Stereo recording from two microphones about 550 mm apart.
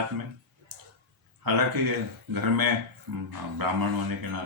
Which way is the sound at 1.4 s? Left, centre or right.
Right.